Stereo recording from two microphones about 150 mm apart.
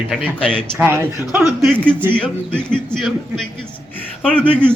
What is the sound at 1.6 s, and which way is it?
Speech, 5° left (ahead or behind).